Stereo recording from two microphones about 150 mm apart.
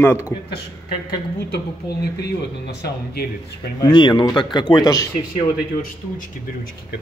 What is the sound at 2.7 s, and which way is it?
Speech, 90° left.